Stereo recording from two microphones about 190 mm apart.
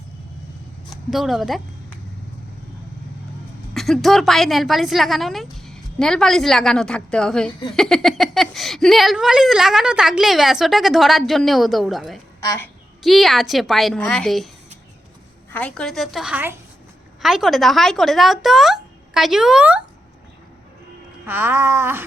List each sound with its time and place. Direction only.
1.1 s speech: centre (ahead or behind)
3.8 s speech: centre (ahead or behind)
12.4 s a woman's voice: 15° left (ahead or behind)
13.0 s speech: centre (ahead or behind)
15.5 s speech: 5° left (ahead or behind)
21.2 s a sound: 10° right (ahead or behind)